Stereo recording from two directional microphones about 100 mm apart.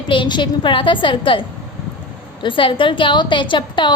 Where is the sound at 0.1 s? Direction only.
50° left (ahead or behind).